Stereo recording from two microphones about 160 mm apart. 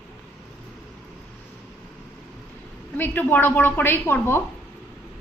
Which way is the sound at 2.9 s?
10° left (ahead or behind).